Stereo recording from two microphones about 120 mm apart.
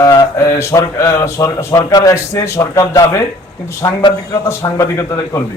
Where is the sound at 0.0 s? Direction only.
30° left (ahead or behind).